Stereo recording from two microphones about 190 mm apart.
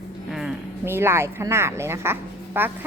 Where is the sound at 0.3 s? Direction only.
5° right (ahead or behind).